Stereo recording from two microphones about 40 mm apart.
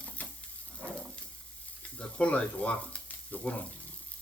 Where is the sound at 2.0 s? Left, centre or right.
Left.